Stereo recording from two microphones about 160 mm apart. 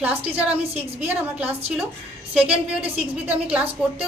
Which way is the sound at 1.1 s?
10° right (ahead or behind).